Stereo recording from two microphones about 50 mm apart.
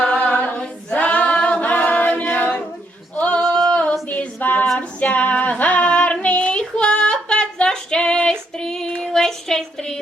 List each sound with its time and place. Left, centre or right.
0.0 s a capella: left
0.6 s a capella: left
3.2 s a sound: left
3.5 s singing: centre
4.4 s female singing: left; by 10.0 s centre